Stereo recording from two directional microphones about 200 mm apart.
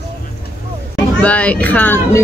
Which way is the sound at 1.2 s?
5° left (ahead or behind).